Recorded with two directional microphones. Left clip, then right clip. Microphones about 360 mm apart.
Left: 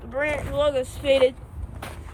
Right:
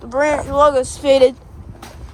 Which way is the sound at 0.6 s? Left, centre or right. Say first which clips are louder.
Right 10 dB; centre.